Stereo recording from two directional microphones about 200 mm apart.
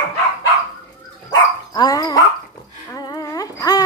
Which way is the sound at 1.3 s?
20° left (ahead or behind).